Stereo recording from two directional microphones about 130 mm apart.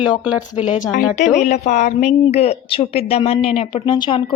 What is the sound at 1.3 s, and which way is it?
A woman's voice, 65° left (ahead or behind).